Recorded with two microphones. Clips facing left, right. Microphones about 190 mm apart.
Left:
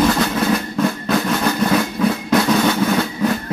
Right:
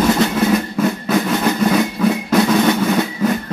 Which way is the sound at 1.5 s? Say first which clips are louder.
Right 2 dB; 20° right (ahead or behind).